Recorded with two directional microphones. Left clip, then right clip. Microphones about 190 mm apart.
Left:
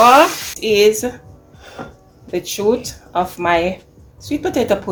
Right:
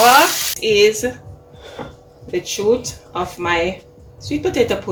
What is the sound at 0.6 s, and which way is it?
Speech, 45° left (ahead or behind).